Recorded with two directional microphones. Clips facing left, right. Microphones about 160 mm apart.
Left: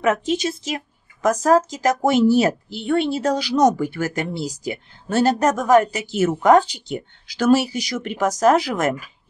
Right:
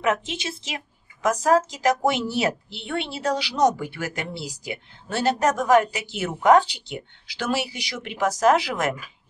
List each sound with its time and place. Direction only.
0.0 s speech: 40° left (ahead or behind)